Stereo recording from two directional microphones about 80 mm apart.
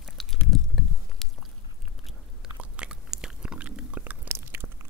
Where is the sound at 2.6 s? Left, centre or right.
Centre.